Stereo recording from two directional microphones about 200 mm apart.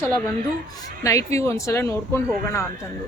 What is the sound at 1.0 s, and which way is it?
Speech, 15° left (ahead or behind).